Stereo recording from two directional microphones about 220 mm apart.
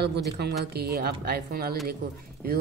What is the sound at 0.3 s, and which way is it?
Speech, 45° right (ahead or behind).